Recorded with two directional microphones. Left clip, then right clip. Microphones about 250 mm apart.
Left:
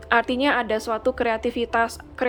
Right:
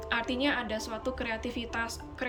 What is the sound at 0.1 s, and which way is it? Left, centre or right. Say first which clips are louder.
A woman's voice: left 10 dB; centre.